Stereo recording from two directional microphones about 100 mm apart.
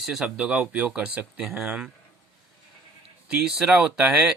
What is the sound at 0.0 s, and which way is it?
Speech, 5° right (ahead or behind).